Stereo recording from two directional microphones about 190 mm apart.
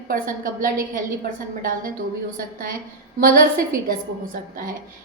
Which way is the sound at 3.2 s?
50° right (ahead or behind).